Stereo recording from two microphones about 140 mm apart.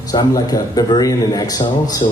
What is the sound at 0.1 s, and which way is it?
Speech, 25° left (ahead or behind).